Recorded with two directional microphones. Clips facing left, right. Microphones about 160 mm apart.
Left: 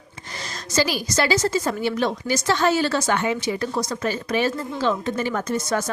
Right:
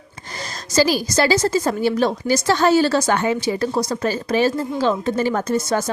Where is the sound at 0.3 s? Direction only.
40° right (ahead or behind).